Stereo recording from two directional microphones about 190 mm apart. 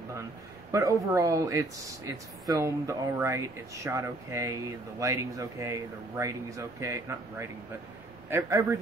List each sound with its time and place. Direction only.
0.7 s speech: 15° right (ahead or behind)